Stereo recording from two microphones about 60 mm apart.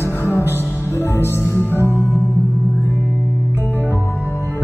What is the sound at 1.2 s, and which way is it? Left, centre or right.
Music, left.